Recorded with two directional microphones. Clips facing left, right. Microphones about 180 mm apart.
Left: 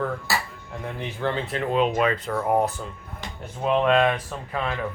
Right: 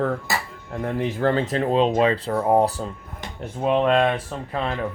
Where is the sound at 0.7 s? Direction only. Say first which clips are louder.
Right 8 dB; 45° right (ahead or behind).